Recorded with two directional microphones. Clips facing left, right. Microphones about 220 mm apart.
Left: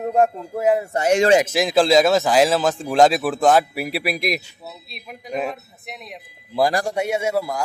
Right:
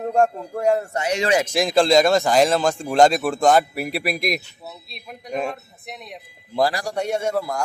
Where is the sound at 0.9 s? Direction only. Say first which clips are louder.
Left 6 dB; 45° left (ahead or behind).